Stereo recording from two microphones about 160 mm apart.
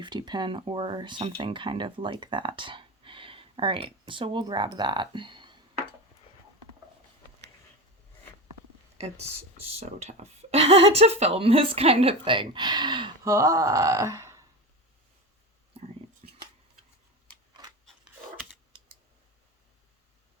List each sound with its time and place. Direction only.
0.0 s speech: 30° right (ahead or behind)
9.8 s speech: 45° right (ahead or behind); by 13.1 s 30° right (ahead or behind)
13.2 s speech: 20° right (ahead or behind)
16.2 s shuffling cards: 40° right (ahead or behind)
17.6 s a sound: 25° right (ahead or behind)